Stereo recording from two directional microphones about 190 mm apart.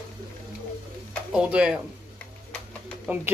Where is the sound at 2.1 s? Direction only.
5° left (ahead or behind).